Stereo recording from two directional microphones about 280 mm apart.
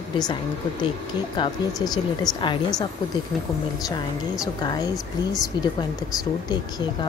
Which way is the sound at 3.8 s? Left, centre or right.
Centre.